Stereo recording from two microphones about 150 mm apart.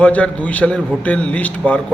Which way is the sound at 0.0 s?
10° left (ahead or behind).